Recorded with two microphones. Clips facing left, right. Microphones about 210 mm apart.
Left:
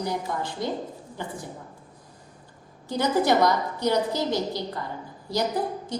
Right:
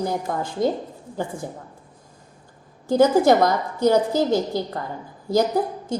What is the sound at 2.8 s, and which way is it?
A woman's voice, 45° right (ahead or behind).